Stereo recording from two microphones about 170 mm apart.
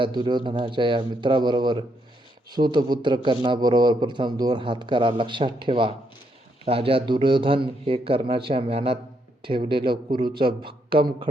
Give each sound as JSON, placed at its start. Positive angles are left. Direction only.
{"t": 0.0, "sound": "a man's voice", "side_deg": -25}